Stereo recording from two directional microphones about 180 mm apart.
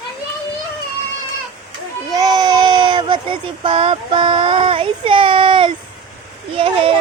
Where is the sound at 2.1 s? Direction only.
20° right (ahead or behind).